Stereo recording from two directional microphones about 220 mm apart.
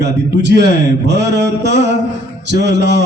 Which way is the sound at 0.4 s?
50° right (ahead or behind).